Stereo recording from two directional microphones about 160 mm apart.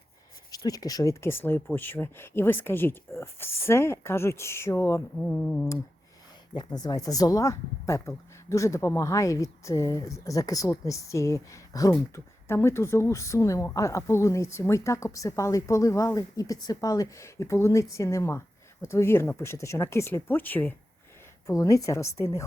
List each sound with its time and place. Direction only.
0.5 s speech: 25° left (ahead or behind)
6.6 s speech: 25° left (ahead or behind)